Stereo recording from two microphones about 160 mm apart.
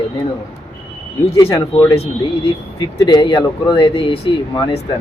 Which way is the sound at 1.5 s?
25° left (ahead or behind).